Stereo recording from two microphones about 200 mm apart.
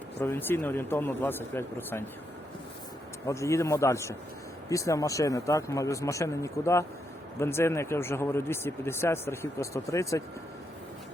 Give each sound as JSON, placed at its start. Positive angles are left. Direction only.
{"t": 0.2, "sound": "speech", "side_deg": 10}
{"t": 3.2, "sound": "speech", "side_deg": 15}